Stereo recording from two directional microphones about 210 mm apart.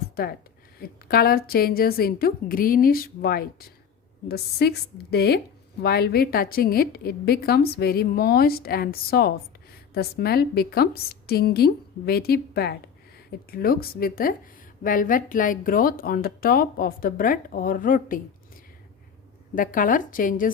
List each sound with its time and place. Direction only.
0.2 s a woman's voice: 45° left (ahead or behind)
19.5 s speech: 40° left (ahead or behind)